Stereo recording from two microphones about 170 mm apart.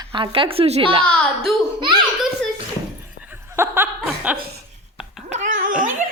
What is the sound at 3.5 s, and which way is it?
Chuckle, 15° right (ahead or behind).